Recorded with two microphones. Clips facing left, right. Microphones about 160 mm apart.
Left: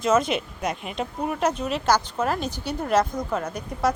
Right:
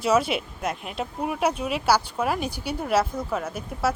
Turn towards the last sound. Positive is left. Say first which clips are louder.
# left 2 dB
turn(degrees=-5)  # may be behind; listen again after turning